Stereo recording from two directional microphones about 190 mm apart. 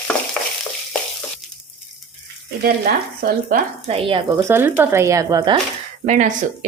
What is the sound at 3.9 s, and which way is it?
Speech, 30° right (ahead or behind).